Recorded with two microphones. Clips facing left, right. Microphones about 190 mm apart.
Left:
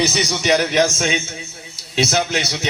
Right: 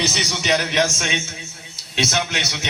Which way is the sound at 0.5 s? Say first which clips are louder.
Left 3 dB; 35° left (ahead or behind).